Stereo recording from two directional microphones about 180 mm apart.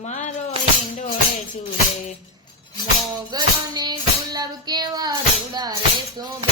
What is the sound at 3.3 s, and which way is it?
Child singing, 20° right (ahead or behind).